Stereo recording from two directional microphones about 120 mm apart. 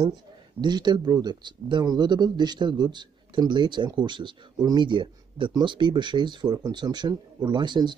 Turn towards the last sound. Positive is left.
turn(degrees=-40)  # may be behind; listen again after turning